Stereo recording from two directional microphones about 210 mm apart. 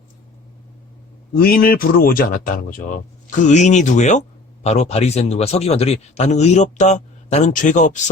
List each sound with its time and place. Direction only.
1.4 s a man's voice: 40° left (ahead or behind)